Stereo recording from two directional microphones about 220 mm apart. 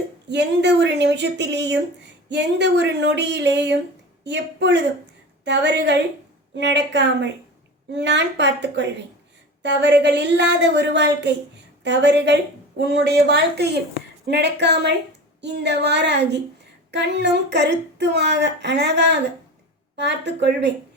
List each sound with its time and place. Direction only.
0.3 s speech: 50° right (ahead or behind)